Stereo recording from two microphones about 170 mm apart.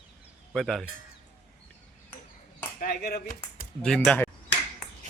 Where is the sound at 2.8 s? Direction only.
65° left (ahead or behind).